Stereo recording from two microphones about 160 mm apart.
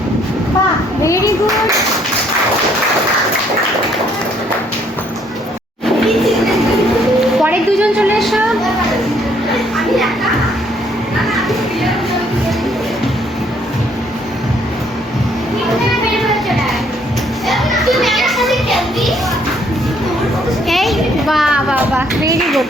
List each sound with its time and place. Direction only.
1.0 s clapping: 20° left (ahead or behind)
5.8 s a sound: centre (ahead or behind)
9.5 s children playing: centre (ahead or behind)
11.3 s children playing: centre (ahead or behind)
16.1 s music: centre (ahead or behind)
17.5 s children playing: centre (ahead or behind)
20.7 s a sound: centre (ahead or behind)